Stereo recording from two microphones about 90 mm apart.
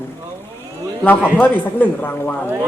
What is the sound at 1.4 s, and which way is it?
Speech, 20° left (ahead or behind).